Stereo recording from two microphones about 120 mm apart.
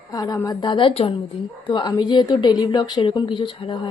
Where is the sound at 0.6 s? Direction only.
45° left (ahead or behind).